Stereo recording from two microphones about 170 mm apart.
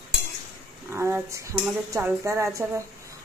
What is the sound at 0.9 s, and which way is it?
Speech, 15° right (ahead or behind).